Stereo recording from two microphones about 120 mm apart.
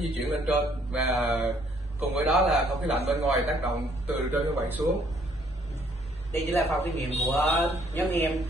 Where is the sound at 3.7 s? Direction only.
65° right (ahead or behind).